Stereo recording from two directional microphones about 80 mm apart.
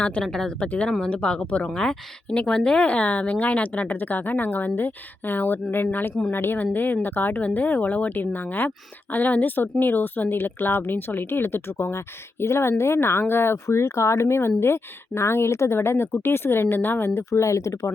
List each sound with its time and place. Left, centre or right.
0.0 s speech: centre; by 17.1 s left
17.2 s speech: left